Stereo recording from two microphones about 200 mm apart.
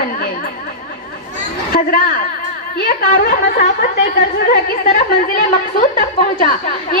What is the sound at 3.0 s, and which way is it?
A woman's voice, 45° left (ahead or behind).